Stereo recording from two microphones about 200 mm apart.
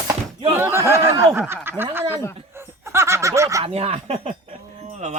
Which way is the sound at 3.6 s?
30° right (ahead or behind).